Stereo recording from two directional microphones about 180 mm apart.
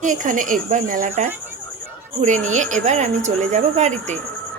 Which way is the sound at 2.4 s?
40° right (ahead or behind).